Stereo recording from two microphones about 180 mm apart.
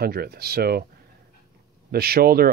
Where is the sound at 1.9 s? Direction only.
55° right (ahead or behind).